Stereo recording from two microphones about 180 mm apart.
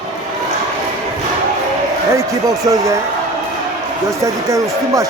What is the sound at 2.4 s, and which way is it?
Speech, 20° right (ahead or behind).